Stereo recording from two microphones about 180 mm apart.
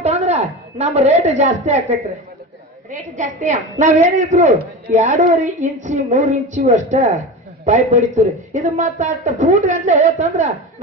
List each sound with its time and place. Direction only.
0.0 s a woman's voice: 35° right (ahead or behind)